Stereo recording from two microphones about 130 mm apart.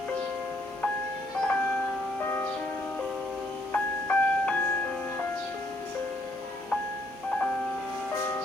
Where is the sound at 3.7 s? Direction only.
10° left (ahead or behind).